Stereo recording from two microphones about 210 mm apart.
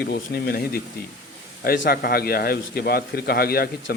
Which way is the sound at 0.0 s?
45° left (ahead or behind).